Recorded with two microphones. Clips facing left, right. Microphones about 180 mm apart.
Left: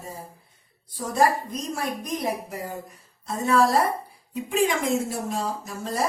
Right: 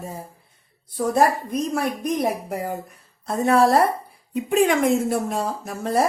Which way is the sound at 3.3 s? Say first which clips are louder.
Right 4 dB; 60° right (ahead or behind).